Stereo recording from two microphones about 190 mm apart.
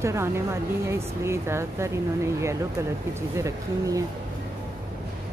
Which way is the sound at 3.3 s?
15° right (ahead or behind).